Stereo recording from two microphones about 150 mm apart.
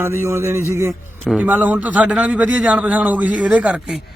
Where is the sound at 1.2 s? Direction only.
10° right (ahead or behind).